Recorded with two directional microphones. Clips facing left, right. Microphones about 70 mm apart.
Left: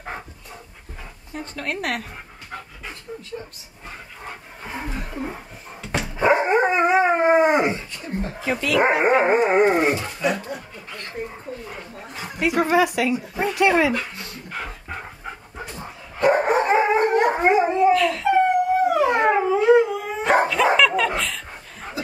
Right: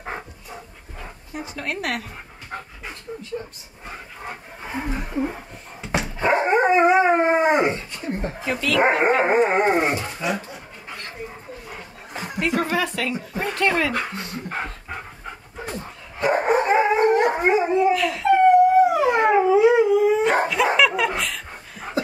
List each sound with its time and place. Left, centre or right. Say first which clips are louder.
1.3 s speech: left 1 dB; centre
3.1 s dog: right 2 dB; centre
3.8 s a sound: right 2 dB; centre
5.8 s dog: right 2 dB; centre
6.1 s dog: left 2 dB; centre
7.9 s a sound: right 1 dB; right
8.5 s speech: even; centre
12.4 s speech: left 4 dB; centre
13.9 s a sound: right 2 dB; right
16.2 s dog: left 1 dB; centre